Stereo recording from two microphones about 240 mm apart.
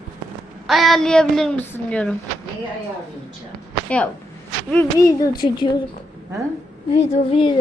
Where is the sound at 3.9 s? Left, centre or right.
Centre.